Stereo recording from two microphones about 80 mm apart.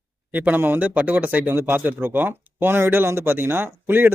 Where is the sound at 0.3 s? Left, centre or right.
Right.